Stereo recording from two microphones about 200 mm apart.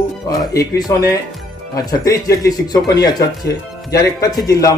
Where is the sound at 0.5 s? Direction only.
20° left (ahead or behind).